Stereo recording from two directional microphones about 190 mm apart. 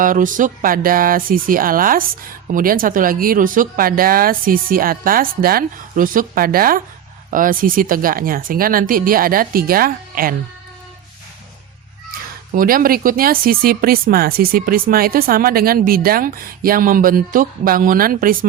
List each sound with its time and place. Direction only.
0.0 s speech: 45° right (ahead or behind)
12.5 s speech: 50° right (ahead or behind)